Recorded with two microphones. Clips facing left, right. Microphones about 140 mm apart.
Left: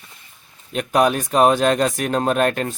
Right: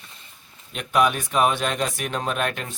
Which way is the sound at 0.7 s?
40° left (ahead or behind).